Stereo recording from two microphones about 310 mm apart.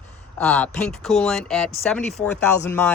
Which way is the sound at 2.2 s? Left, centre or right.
Left.